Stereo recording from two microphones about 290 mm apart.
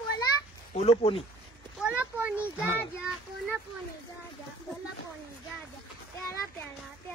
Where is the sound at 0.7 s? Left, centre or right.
Left.